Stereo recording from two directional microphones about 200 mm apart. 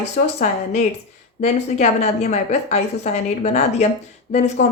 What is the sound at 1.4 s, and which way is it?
Speech, 35° left (ahead or behind).